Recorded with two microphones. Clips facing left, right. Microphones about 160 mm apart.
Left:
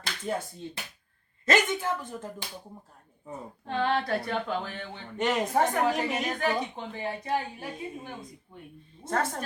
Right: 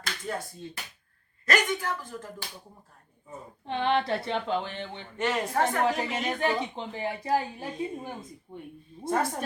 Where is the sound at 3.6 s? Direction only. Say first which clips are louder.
Right 1 dB; 20° right (ahead or behind).